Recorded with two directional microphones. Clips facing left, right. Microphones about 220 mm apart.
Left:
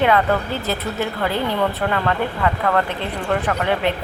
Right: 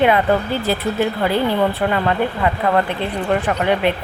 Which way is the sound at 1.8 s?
20° right (ahead or behind).